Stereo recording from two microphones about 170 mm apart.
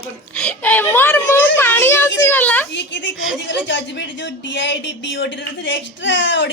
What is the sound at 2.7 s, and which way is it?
Speech, 90° left.